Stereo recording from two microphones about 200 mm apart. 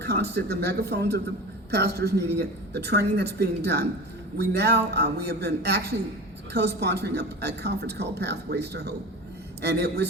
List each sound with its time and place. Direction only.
0.0 s a woman's voice: 55° right (ahead or behind)